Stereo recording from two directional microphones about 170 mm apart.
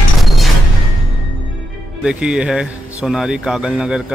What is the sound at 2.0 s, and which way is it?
A man's voice, 5° right (ahead or behind).